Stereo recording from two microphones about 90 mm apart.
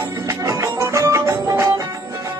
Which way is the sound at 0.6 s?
35° right (ahead or behind).